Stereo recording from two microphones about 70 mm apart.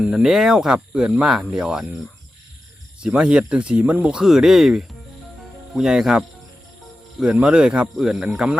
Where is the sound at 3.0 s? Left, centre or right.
Centre.